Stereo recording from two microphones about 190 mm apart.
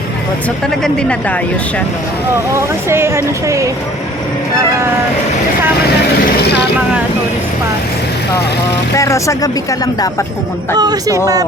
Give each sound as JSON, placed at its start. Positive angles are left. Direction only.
{"t": 0.8, "sound": "speech", "side_deg": 5}
{"t": 2.6, "sound": "speech", "side_deg": -15}
{"t": 9.0, "sound": "speech", "side_deg": 15}
{"t": 10.8, "sound": "speech", "side_deg": -20}